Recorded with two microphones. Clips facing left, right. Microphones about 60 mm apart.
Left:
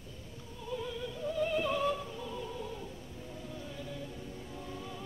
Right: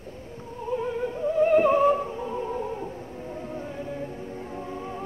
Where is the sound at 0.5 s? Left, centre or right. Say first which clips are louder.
Right 11 dB; right.